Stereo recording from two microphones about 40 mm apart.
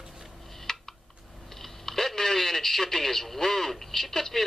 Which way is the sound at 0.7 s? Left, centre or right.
Centre.